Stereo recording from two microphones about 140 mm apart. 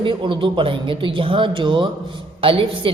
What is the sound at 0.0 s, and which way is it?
A woman's voice, 35° right (ahead or behind).